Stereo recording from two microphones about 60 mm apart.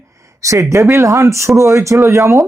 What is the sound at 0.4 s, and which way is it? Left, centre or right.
Speech, right.